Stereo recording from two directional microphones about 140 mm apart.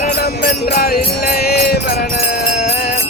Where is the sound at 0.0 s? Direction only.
80° left.